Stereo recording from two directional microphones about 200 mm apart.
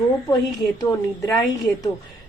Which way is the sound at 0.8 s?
15° left (ahead or behind).